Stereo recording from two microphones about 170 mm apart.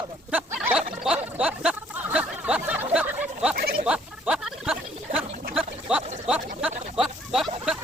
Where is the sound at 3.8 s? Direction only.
5° right (ahead or behind).